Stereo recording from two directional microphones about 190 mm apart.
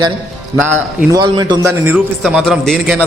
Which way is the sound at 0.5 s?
10° right (ahead or behind).